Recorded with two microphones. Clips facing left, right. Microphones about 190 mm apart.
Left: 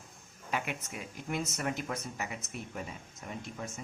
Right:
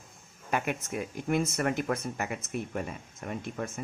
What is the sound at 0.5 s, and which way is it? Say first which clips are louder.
Speech: right 6 dB; 50° right (ahead or behind).